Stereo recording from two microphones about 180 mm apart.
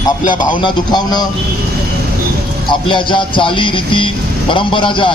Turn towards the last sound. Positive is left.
turn(degrees=25)  # may be behind; listen again after turning